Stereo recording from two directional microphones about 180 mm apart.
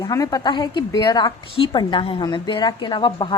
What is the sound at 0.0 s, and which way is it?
A woman's voice, 20° left (ahead or behind).